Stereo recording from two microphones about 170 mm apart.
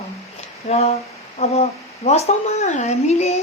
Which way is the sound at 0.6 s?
40° left (ahead or behind).